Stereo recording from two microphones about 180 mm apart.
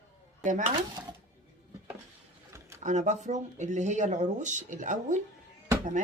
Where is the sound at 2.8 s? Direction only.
40° right (ahead or behind).